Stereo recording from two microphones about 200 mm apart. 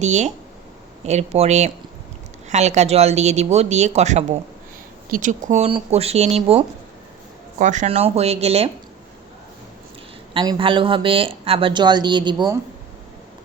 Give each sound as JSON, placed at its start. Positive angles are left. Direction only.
{"t": 0.0, "sound": "speech", "side_deg": -35}
{"t": 10.3, "sound": "speech", "side_deg": -20}